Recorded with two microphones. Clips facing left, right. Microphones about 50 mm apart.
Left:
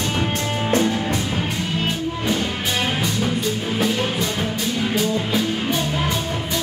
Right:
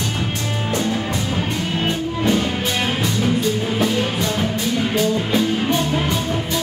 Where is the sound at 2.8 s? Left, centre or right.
Centre.